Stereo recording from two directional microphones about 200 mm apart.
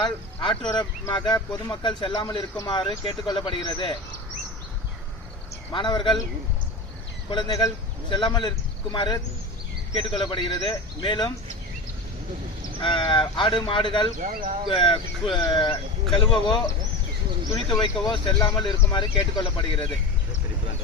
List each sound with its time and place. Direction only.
0.0 s speech: 20° left (ahead or behind)
5.7 s speech: 25° left (ahead or behind)
7.3 s speech: 25° left (ahead or behind)
12.8 s speech: 25° left (ahead or behind)
14.2 s speech: 40° right (ahead or behind)
14.7 s speech: 25° left (ahead or behind)
18.0 s speech: 20° left (ahead or behind)